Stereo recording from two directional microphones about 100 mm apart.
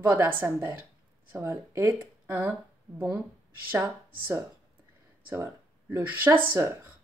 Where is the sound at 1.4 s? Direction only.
35° right (ahead or behind).